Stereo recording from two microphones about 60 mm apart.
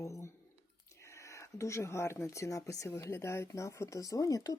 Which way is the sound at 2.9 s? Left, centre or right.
Left.